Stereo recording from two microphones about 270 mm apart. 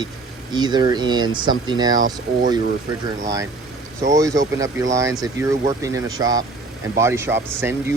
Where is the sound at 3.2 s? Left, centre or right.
Centre.